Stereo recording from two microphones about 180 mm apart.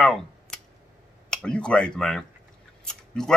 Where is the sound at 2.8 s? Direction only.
5° left (ahead or behind).